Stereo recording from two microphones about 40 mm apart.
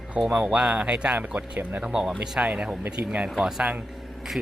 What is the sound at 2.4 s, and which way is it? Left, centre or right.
Speech, right.